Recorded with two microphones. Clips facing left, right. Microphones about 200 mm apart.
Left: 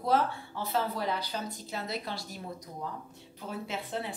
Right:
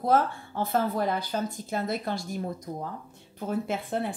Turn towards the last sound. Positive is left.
turn(degrees=-50)  # may be behind; listen again after turning